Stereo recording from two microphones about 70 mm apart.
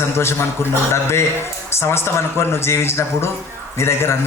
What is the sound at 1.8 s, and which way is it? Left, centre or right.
A man's voice, left.